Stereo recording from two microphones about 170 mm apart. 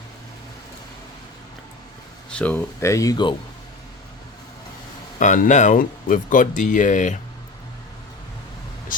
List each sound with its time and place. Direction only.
2.3 s speech: 10° left (ahead or behind); by 3.3 s 25° left (ahead or behind)
5.2 s speech: 50° left (ahead or behind)